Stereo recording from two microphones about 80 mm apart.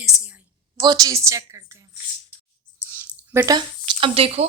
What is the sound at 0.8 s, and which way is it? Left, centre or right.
Speech, right.